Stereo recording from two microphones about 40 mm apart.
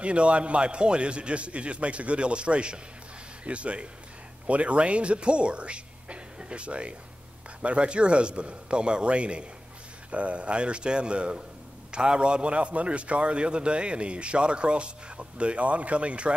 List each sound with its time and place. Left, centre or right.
0.0 s a man's voice: right